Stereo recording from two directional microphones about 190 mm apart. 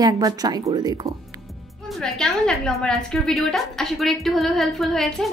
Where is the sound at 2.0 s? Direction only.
Centre (ahead or behind).